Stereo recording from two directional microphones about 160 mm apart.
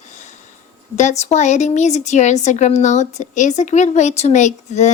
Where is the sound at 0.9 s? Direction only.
45° left (ahead or behind).